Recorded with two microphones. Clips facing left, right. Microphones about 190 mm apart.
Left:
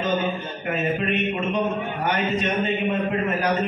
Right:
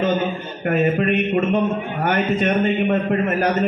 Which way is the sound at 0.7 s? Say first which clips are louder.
Right 6 dB; 55° right (ahead or behind).